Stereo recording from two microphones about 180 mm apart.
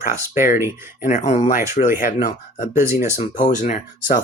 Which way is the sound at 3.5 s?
40° left (ahead or behind).